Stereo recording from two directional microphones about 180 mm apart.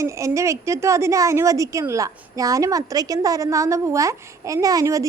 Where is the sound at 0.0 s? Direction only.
15° right (ahead or behind).